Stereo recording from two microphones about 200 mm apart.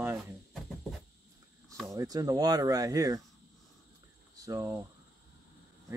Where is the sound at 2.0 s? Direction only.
20° right (ahead or behind).